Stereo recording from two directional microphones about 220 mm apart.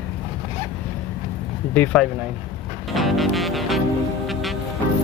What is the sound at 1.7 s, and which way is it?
Speech, 10° left (ahead or behind).